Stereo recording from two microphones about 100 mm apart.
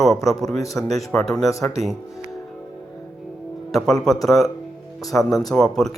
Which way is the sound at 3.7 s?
5° left (ahead or behind).